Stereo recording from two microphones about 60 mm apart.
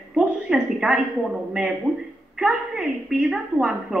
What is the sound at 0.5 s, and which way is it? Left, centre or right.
A woman's voice, centre.